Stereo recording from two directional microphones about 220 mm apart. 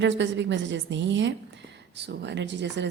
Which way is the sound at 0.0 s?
55° right (ahead or behind).